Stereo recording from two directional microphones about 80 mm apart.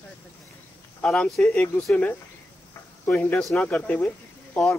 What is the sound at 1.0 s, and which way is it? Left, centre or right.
Speech, centre.